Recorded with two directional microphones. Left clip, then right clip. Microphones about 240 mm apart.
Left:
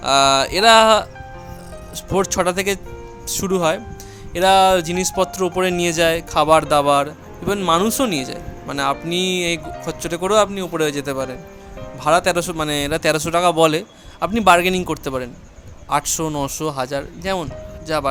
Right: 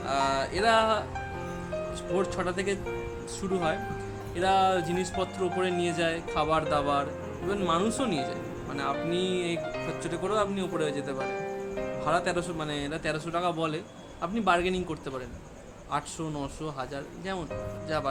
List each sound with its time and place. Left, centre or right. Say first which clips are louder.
0.0 s speech: left 13 dB; left
2.1 s speech: left 12 dB; left